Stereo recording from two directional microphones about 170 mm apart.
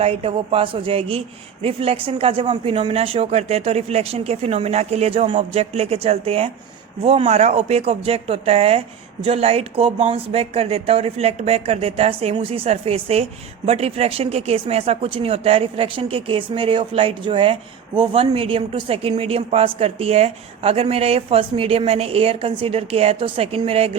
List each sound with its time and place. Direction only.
0.0 s speech: 35° right (ahead or behind)